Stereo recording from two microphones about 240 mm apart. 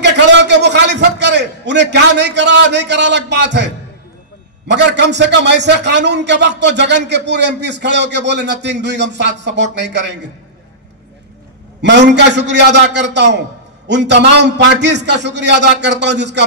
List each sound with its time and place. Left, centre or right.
0.0 s a sound: right
4.6 s a man's voice: right
11.8 s a man's voice: right